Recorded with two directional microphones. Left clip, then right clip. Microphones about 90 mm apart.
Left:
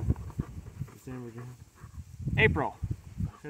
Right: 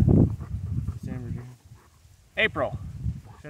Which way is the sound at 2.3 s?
25° right (ahead or behind).